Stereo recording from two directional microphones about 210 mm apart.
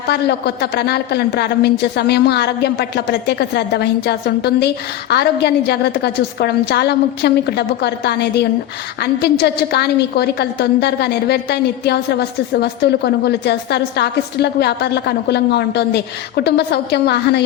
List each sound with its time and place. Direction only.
0.1 s a woman's voice: 50° left (ahead or behind)